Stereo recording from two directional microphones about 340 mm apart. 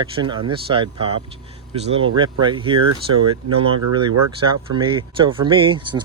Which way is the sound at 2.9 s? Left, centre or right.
Right.